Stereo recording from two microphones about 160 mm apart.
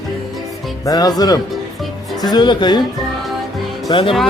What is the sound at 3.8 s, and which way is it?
Speech, 35° left (ahead or behind).